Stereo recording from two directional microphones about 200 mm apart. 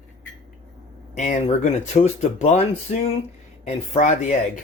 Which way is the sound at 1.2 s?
35° left (ahead or behind).